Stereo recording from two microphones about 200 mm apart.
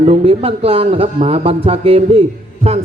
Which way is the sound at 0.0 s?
30° right (ahead or behind).